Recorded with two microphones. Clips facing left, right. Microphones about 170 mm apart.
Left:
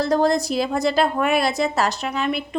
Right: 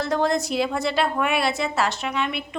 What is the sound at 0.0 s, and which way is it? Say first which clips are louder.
A woman's voice: left 4 dB; 35° left (ahead or behind).